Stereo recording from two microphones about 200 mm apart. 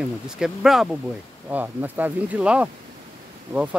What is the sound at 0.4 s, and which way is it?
Speech, centre (ahead or behind).